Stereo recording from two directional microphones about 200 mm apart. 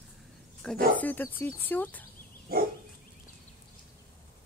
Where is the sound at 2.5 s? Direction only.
50° right (ahead or behind).